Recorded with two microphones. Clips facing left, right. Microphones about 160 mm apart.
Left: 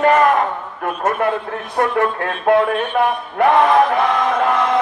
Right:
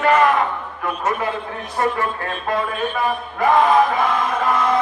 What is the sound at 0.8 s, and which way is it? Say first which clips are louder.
A man's voice: left 4 dB; 50° left (ahead or behind).